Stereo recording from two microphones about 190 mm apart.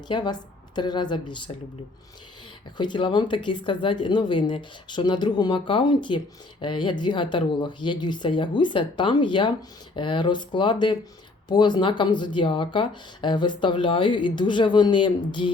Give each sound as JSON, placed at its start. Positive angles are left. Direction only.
{"t": 0.1, "sound": "speech", "side_deg": 25}
{"t": 2.7, "sound": "speech", "side_deg": 25}